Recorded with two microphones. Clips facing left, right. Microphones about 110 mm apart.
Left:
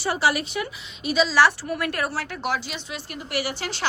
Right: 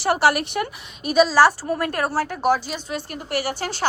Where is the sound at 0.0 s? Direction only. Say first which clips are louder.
Right 4 dB; 65° right (ahead or behind); by 1.4 s 50° right (ahead or behind).